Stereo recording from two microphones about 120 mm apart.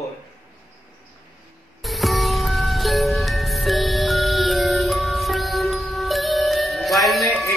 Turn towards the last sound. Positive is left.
turn(degrees=0)  # may be behind; listen again after turning